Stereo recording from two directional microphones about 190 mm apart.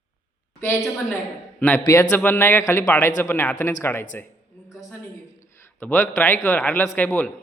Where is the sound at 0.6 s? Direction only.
10° left (ahead or behind).